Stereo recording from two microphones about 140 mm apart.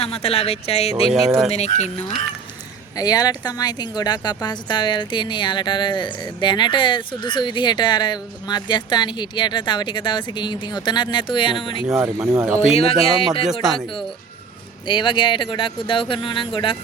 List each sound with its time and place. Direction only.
0.0 s speech: 45° left (ahead or behind)
2.9 s speech: 25° left (ahead or behind)
11.9 s speech: 5° right (ahead or behind)
12.3 s speech: 20° right (ahead or behind)
12.6 s speech: 45° left (ahead or behind)
14.8 s speech: 35° left (ahead or behind)